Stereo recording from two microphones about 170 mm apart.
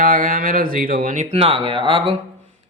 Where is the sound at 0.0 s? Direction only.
55° right (ahead or behind).